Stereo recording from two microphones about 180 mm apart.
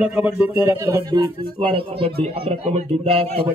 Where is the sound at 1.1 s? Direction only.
30° right (ahead or behind).